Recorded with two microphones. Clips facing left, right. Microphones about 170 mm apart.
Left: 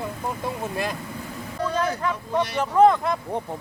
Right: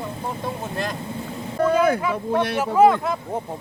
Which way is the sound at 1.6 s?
55° right (ahead or behind).